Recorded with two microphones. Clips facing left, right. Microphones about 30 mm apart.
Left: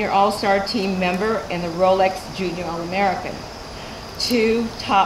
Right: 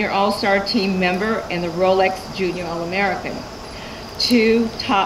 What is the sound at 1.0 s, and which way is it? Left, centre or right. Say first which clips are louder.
Speech: right 1 dB; right.